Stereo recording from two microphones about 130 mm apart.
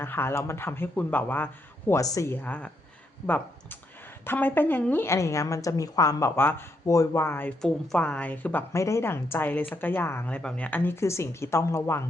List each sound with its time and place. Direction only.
0.0 s a woman's voice: 15° left (ahead or behind)
1.9 s a woman's voice: 25° left (ahead or behind)